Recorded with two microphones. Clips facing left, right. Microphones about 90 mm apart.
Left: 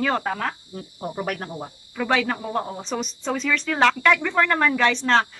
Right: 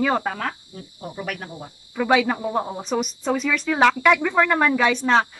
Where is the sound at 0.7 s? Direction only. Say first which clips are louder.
Left 4 dB; 35° left (ahead or behind).